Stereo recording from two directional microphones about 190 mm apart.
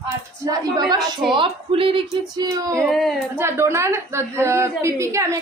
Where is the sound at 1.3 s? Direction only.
25° right (ahead or behind).